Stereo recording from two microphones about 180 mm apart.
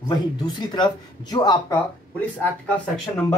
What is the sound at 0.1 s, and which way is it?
Speech, 25° left (ahead or behind).